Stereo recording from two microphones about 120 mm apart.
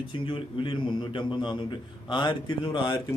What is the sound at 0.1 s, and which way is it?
A man's voice, 45° left (ahead or behind).